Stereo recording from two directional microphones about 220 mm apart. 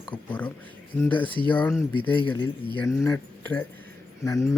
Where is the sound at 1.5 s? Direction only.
5° left (ahead or behind).